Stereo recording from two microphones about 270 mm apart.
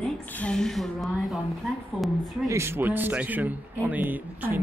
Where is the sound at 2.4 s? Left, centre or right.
Centre.